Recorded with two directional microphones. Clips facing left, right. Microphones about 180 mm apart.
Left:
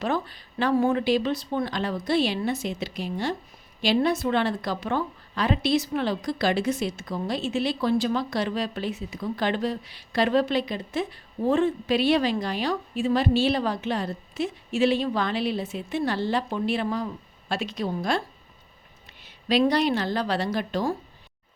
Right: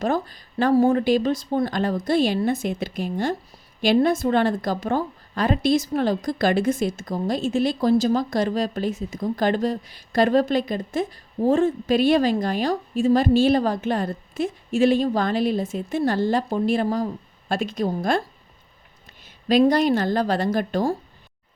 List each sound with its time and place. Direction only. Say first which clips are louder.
0.0 s a woman's voice: right 4 dB; 45° right (ahead or behind)
19.2 s a woman's voice: right 5 dB; 45° right (ahead or behind)